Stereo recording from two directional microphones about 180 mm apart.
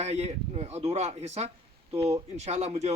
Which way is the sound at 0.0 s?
35° right (ahead or behind).